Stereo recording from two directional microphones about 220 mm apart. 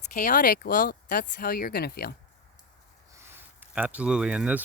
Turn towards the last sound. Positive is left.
turn(degrees=-5)  # may be behind; listen again after turning